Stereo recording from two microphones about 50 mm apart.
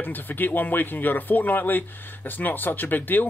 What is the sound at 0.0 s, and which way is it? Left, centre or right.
Speech, left.